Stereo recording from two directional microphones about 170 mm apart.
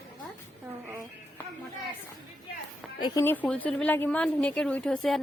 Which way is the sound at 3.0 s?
25° left (ahead or behind).